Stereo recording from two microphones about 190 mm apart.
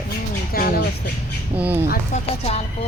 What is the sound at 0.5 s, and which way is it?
Speech, 50° left (ahead or behind).